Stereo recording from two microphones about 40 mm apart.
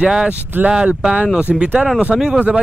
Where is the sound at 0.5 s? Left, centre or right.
Right.